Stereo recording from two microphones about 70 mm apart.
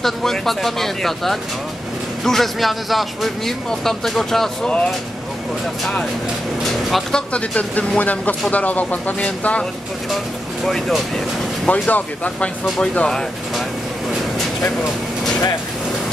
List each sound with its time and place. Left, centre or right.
0.0 s speech: centre
4.6 s speech: centre
6.6 s speech: centre
10.6 s speech: centre